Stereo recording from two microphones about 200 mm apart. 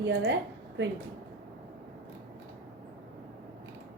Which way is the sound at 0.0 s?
60° right (ahead or behind).